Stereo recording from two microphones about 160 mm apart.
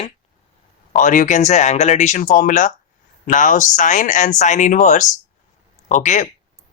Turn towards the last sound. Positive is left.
turn(degrees=50)  # may be behind; listen again after turning